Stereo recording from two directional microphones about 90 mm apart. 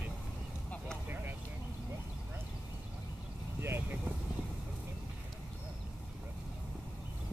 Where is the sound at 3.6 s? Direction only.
25° right (ahead or behind).